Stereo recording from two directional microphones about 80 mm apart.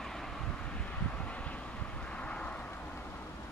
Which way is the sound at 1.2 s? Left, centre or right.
Centre.